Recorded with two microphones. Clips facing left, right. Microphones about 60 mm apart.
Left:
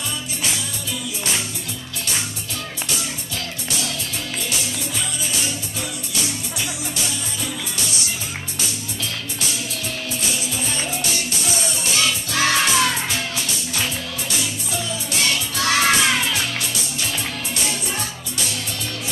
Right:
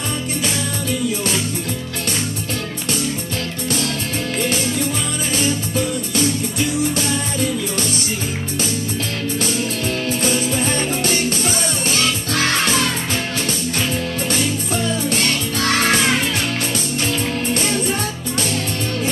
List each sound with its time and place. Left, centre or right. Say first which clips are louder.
4.4 s music: right 10 dB; right
10.2 s music: right 8 dB; right